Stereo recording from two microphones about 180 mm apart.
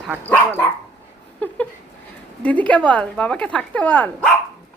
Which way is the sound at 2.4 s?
10° left (ahead or behind).